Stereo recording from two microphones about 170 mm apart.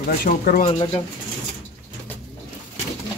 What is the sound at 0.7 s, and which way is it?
Speech, 35° left (ahead or behind).